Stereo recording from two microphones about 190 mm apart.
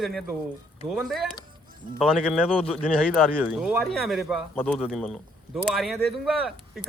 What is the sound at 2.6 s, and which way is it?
Speech, 30° left (ahead or behind).